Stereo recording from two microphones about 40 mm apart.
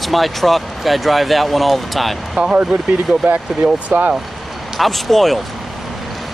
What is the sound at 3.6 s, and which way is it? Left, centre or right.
Speech, centre.